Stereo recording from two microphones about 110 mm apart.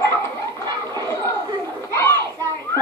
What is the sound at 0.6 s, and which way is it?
Chatter, 35° right (ahead or behind).